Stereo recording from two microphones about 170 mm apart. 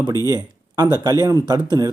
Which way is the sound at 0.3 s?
25° right (ahead or behind).